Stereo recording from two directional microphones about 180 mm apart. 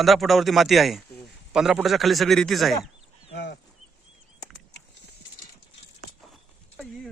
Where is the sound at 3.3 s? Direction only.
70° left (ahead or behind).